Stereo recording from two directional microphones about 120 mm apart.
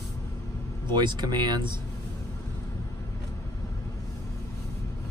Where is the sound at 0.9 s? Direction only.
40° right (ahead or behind).